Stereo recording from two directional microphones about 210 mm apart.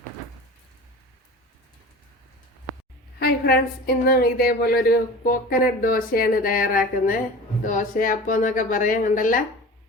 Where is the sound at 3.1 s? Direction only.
45° left (ahead or behind).